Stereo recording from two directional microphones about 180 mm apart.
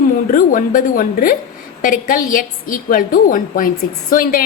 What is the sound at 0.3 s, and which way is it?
A woman's voice, 50° left (ahead or behind).